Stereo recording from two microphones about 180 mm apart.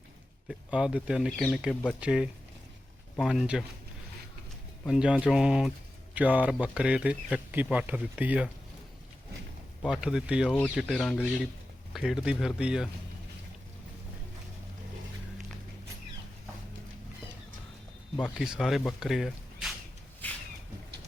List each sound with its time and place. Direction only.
0.4 s speech: 5° right (ahead or behind)
4.9 s speech: 5° right (ahead or behind)
9.8 s speech: 5° right (ahead or behind)
11.9 s speech: 5° right (ahead or behind)
18.2 s speech: centre (ahead or behind)